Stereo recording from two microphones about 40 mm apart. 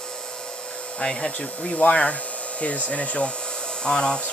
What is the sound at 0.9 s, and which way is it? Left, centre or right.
Speech, left.